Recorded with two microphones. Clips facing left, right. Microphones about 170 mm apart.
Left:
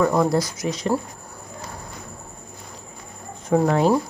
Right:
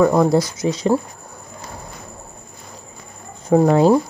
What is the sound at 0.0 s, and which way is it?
Speech, 15° right (ahead or behind).